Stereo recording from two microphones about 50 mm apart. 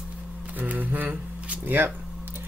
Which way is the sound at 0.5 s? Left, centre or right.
Right.